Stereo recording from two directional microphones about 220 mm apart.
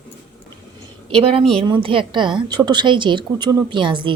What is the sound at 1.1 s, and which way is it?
A woman's voice, 25° right (ahead or behind).